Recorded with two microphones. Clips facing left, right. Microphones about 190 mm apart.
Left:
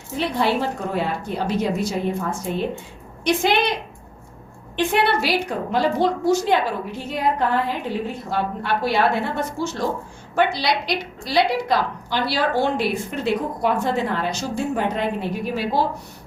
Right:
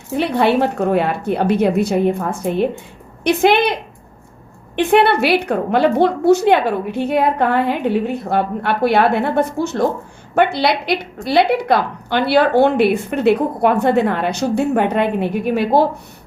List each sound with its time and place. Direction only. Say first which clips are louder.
0.2 s a woman's voice: right 6 dB; 65° right (ahead or behind)
4.8 s a woman's voice: right 7 dB; 60° right (ahead or behind)